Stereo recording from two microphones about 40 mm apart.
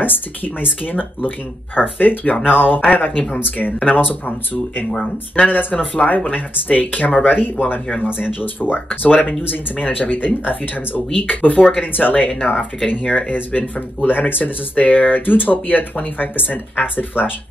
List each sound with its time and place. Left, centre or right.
0.0 s speech: left
1.8 s speech: left
2.4 s speech: right
2.9 s speech: left
5.3 s speech: left